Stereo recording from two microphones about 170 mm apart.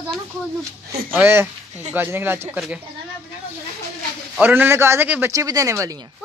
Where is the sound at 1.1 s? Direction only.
15° right (ahead or behind).